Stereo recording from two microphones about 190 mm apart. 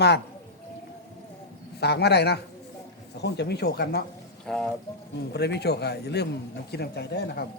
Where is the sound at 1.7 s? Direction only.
60° left (ahead or behind).